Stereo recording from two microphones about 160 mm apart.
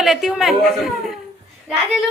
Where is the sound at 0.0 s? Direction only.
Centre (ahead or behind).